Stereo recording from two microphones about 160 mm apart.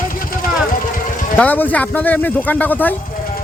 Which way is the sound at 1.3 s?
10° left (ahead or behind).